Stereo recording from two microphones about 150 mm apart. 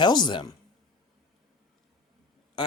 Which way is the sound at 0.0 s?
30° left (ahead or behind).